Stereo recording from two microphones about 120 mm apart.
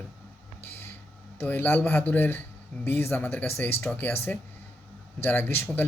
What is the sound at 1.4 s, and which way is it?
A man's voice, 15° left (ahead or behind).